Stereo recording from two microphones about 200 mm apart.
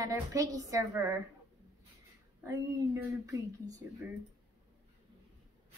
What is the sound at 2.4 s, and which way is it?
Speech, 15° right (ahead or behind).